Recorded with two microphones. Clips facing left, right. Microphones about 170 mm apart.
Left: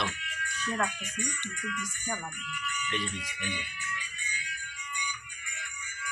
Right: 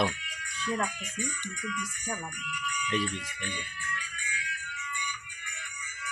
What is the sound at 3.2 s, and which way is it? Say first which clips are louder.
Music: left 1 dB; 15° left (ahead or behind).